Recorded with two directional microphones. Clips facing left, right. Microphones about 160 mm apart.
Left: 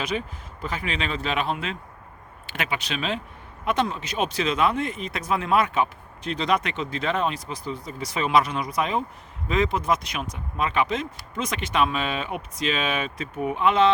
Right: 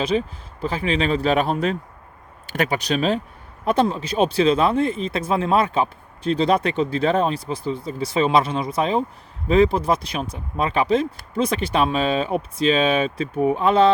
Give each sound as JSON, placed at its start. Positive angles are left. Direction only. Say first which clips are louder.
{"t": 0.0, "sound": "speech", "louder": "right 7 dB", "side_deg": -30}